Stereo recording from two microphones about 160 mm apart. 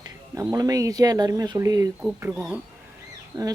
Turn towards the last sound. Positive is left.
turn(degrees=-25)  # may be behind; listen again after turning